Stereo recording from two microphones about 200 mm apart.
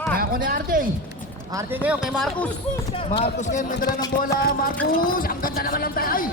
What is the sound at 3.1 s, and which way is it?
Speech, 30° left (ahead or behind).